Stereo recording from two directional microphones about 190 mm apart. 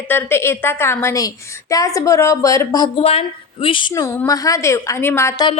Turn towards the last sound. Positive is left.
turn(degrees=15)  # may be behind; listen again after turning